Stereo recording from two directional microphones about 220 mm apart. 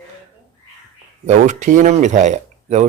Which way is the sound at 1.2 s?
35° right (ahead or behind).